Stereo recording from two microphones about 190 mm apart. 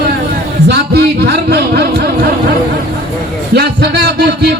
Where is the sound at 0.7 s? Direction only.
60° right (ahead or behind).